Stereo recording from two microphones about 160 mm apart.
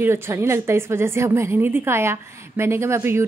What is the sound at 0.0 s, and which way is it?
Speech, 15° right (ahead or behind).